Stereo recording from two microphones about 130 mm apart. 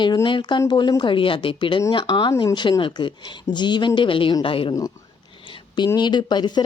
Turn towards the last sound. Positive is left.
turn(degrees=35)  # may be behind; listen again after turning